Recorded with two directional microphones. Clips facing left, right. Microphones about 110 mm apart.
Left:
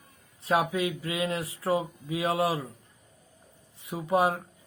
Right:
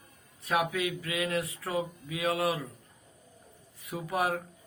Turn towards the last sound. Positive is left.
turn(degrees=25)  # may be behind; listen again after turning